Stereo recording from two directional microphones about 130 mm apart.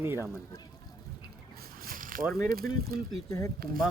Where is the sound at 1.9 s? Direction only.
90° right.